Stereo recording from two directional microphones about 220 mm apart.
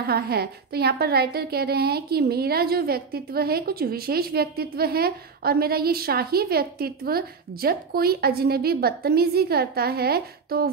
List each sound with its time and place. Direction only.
0.0 s a woman's voice: 45° right (ahead or behind)